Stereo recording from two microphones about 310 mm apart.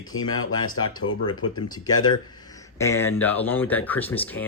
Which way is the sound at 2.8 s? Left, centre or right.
Centre.